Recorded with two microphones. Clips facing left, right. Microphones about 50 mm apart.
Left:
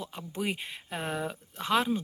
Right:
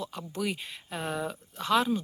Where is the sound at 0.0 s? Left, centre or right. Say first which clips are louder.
Right 1 dB; left.